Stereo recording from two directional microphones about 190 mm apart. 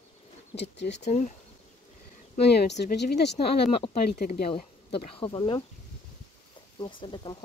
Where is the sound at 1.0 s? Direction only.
40° left (ahead or behind).